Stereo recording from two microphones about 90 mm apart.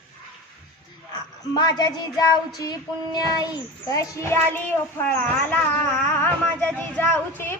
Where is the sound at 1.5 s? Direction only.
50° left (ahead or behind).